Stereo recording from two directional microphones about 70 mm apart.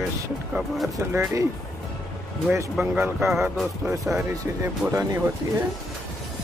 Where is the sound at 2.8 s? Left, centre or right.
Right.